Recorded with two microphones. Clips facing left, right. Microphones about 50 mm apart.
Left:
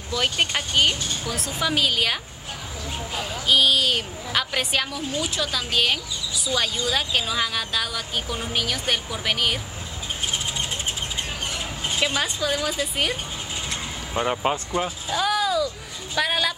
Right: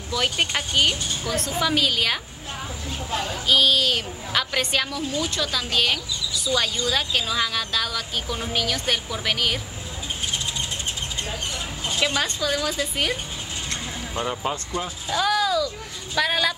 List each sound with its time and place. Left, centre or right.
0.1 s a woman's voice: centre
3.2 s a woman's voice: centre
12.0 s speech: centre
14.1 s speech: left
15.0 s a sound: centre
16.2 s a woman's voice: centre